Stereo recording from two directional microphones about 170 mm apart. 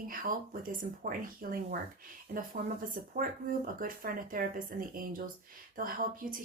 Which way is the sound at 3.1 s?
55° right (ahead or behind).